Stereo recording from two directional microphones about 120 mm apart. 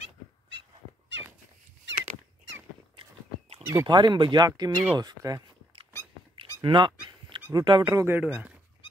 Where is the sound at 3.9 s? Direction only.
40° right (ahead or behind).